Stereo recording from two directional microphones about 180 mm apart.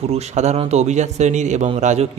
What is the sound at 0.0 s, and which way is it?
A man's voice, 35° right (ahead or behind).